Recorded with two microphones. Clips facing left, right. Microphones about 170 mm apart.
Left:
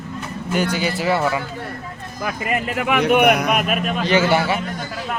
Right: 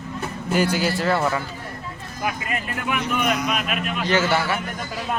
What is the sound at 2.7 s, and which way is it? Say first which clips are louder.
Speech: left 9 dB; 80° left.